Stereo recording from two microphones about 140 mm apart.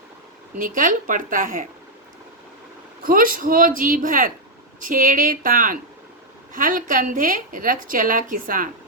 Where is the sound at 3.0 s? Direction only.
90° right.